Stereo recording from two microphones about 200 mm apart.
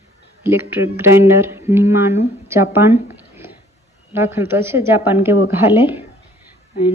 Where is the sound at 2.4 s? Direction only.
10° right (ahead or behind).